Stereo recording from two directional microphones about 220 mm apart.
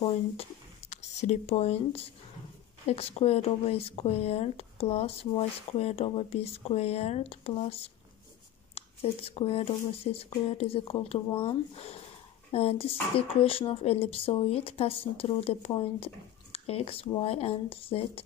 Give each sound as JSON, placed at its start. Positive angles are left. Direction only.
{"t": 0.0, "sound": "speech", "side_deg": 30}